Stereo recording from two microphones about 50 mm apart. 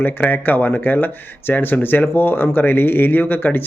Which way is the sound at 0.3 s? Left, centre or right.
Left.